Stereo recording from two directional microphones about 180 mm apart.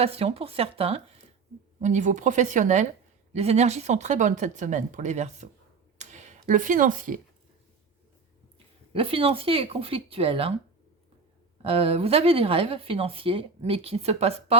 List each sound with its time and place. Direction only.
0.0 s speech: 35° right (ahead or behind)
6.0 s a sound: 40° right (ahead or behind)
8.5 s speech: 30° right (ahead or behind)
11.6 s speech: 35° right (ahead or behind)